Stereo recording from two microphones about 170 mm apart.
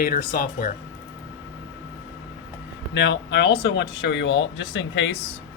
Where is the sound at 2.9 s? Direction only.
90° left.